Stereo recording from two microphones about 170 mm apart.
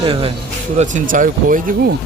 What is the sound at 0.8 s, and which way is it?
Speech, 50° right (ahead or behind).